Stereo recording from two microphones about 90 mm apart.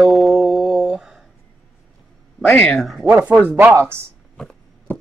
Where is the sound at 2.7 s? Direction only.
Centre (ahead or behind).